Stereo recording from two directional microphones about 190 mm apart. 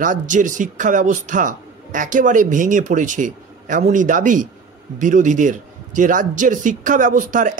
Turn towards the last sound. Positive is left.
turn(degrees=-45)  # may be behind; listen again after turning